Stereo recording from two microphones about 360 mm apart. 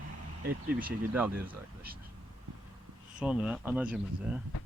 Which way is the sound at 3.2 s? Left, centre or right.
Centre.